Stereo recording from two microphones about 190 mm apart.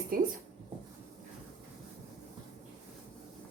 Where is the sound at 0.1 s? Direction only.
50° right (ahead or behind).